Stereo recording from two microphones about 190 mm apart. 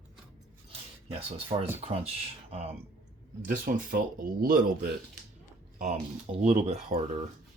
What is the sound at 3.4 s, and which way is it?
Speech, 45° right (ahead or behind).